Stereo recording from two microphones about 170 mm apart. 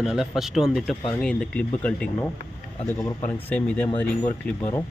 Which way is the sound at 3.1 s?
40° left (ahead or behind).